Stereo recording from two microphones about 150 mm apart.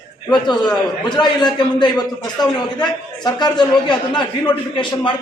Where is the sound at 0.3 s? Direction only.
30° left (ahead or behind).